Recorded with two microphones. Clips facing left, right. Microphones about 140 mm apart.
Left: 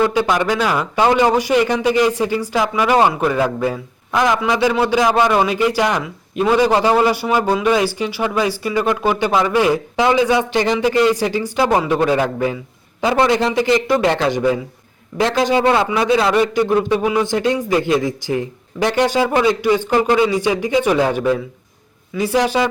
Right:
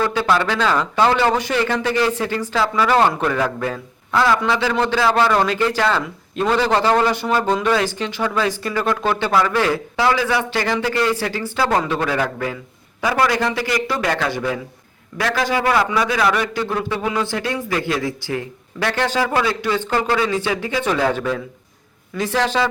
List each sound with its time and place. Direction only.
0.0 s a man's voice: 15° left (ahead or behind)